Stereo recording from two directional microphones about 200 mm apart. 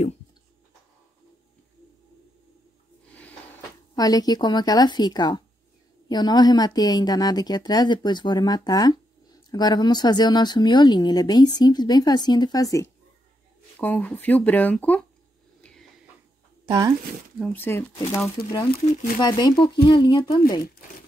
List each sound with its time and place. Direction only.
3.9 s a woman's voice: 20° left (ahead or behind)
16.6 s speech: 20° right (ahead or behind)
17.4 s speech: 10° left (ahead or behind)
19.1 s a woman's voice: 20° left (ahead or behind)